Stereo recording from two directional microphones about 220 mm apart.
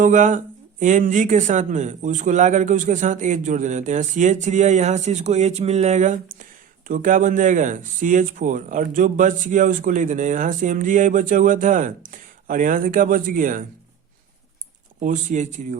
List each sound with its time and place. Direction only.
0.0 s speech: 35° right (ahead or behind)
15.0 s speech: 35° right (ahead or behind)